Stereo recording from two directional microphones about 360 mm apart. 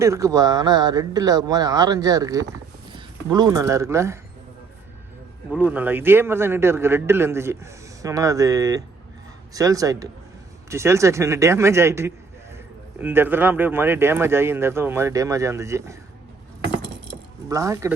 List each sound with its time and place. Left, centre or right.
0.0 s speech: centre
5.5 s speech: centre
17.5 s speech: centre